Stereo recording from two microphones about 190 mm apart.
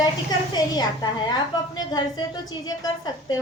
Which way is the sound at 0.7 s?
20° left (ahead or behind).